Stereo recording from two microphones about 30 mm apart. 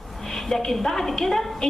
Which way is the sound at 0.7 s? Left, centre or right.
Centre.